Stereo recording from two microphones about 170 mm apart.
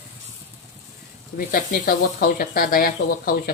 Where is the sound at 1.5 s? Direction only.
60° left (ahead or behind).